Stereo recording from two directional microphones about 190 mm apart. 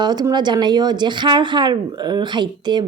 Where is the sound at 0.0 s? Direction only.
20° right (ahead or behind).